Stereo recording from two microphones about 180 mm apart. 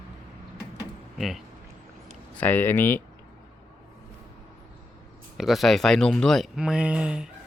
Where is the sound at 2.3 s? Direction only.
10° left (ahead or behind).